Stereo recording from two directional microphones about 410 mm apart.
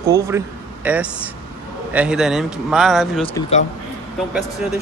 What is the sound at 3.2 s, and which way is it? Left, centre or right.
Speech, centre.